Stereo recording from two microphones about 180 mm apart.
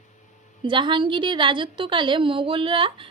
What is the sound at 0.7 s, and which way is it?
A woman's voice, 25° right (ahead or behind).